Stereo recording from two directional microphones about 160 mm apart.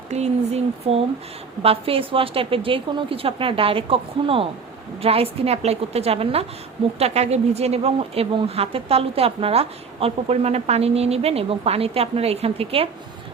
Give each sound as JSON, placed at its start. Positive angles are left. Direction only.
{"t": 0.1, "sound": "speech", "side_deg": -45}